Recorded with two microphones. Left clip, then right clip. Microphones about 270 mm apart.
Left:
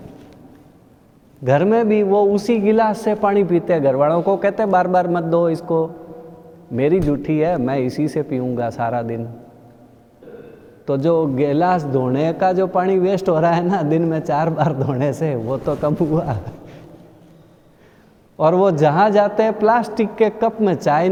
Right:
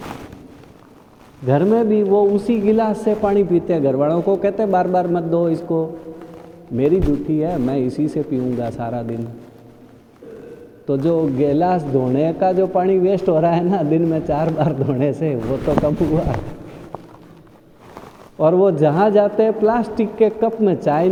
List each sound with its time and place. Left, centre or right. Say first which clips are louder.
1.5 s a man's voice: left 1 dB; left
10.8 s a man's voice: left 1 dB; left
18.3 s a man's voice: even; left